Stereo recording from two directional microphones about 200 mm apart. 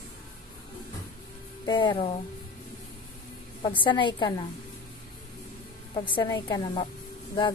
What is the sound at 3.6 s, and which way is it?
Speech, 25° left (ahead or behind).